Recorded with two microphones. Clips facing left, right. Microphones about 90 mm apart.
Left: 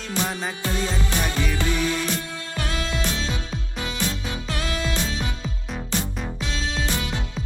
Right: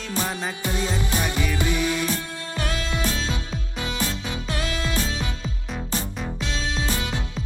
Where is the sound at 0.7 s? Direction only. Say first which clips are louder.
Right 1 dB; 20° right (ahead or behind).